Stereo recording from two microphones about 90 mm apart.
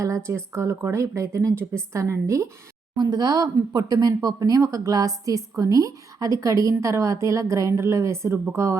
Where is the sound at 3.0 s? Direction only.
50° right (ahead or behind).